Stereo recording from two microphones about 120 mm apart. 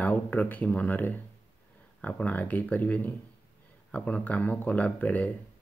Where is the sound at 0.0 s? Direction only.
15° left (ahead or behind).